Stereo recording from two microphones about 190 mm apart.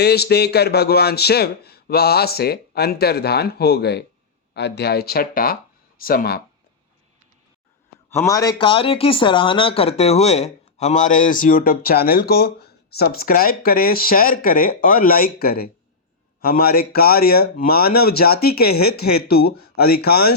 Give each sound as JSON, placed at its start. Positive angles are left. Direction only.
{"t": 0.0, "sound": "speech", "side_deg": 60}
{"t": 8.1, "sound": "speech", "side_deg": 15}